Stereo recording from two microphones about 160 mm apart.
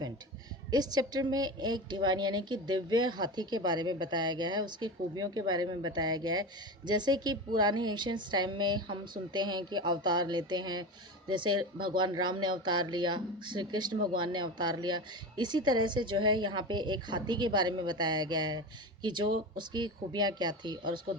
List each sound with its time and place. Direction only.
0.7 s a woman's voice: 25° right (ahead or behind)